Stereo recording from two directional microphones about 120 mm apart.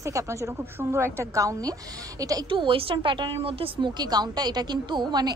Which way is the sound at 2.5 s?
45° right (ahead or behind).